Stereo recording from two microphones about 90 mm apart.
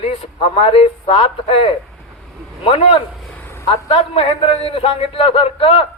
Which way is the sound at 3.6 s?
90° left.